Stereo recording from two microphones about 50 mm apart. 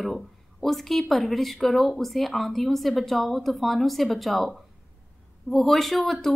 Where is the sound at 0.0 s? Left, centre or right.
Centre.